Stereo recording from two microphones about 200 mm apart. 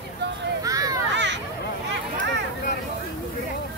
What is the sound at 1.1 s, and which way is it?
Children playing, 65° right (ahead or behind).